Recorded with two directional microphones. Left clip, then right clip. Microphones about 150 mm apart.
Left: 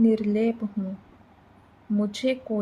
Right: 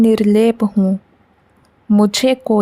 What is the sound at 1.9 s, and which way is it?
Speech, 90° right.